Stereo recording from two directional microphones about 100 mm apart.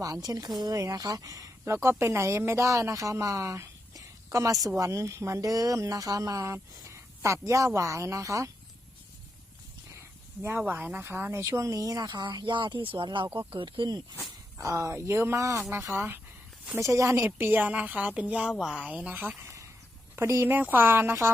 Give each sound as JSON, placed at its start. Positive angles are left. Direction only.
{"t": 0.0, "sound": "speech", "side_deg": -40}
{"t": 10.6, "sound": "speech", "side_deg": -15}
{"t": 14.6, "sound": "speech", "side_deg": -30}
{"t": 17.3, "sound": "a woman's voice", "side_deg": -20}
{"t": 20.1, "sound": "speech", "side_deg": -25}